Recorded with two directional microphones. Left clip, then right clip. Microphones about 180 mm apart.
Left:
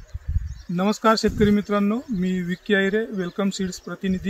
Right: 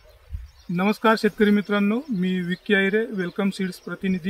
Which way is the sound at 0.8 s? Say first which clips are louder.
Even; 40° left (ahead or behind).